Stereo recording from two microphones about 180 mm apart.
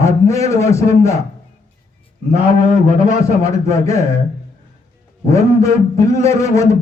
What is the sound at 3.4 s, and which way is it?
Speech, 15° left (ahead or behind).